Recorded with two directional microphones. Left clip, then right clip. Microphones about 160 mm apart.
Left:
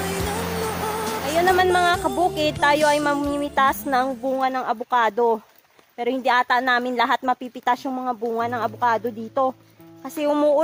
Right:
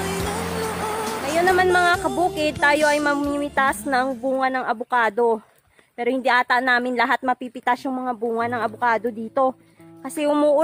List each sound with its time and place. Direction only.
0.0 s a woman's voice: centre (ahead or behind)